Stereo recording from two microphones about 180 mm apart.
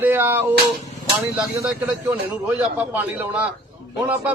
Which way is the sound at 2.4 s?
10° right (ahead or behind).